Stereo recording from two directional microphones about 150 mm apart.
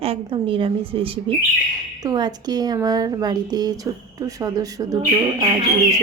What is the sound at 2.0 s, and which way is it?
A woman's voice, 25° right (ahead or behind).